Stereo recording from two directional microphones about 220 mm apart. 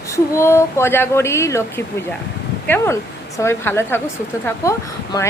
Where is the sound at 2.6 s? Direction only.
10° left (ahead or behind).